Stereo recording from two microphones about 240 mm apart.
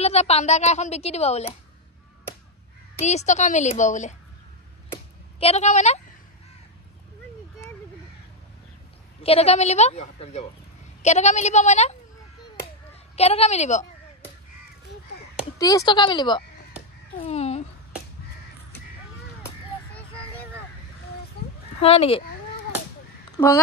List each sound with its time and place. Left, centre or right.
0.0 s a woman's voice: left
3.0 s a woman's voice: left
4.9 s a sound: left
9.2 s a woman's voice: left
13.1 s a woman's voice: left
15.6 s a woman's voice: centre
17.2 s a sound: left
21.7 s speech: left
23.3 s speech: centre